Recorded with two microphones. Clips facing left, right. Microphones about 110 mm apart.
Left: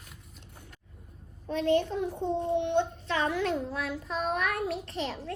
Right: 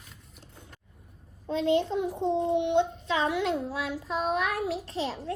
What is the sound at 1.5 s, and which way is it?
Child singing, 20° right (ahead or behind).